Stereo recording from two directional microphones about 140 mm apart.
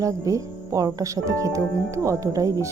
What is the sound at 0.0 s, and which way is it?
Speech, 25° right (ahead or behind).